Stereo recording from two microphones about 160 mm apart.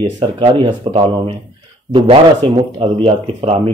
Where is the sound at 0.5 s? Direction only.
30° right (ahead or behind).